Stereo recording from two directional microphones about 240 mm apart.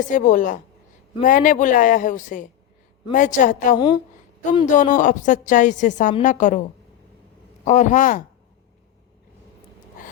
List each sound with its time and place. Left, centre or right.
0.1 s a woman's voice: left
7.6 s a woman's voice: left